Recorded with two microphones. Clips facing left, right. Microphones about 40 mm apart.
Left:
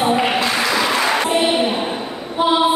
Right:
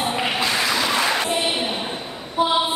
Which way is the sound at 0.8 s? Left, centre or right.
Centre.